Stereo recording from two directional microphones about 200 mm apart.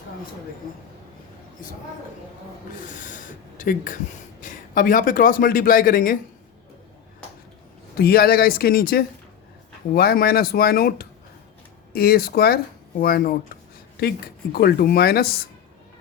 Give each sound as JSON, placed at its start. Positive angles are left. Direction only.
{"t": 2.8, "sound": "speech", "side_deg": 40}
{"t": 7.9, "sound": "speech", "side_deg": 50}
{"t": 14.5, "sound": "speech", "side_deg": 50}